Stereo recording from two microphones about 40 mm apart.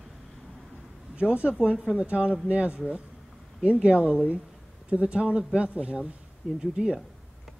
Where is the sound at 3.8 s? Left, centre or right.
Right.